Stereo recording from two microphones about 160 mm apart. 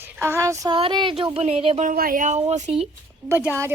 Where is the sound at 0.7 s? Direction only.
30° right (ahead or behind).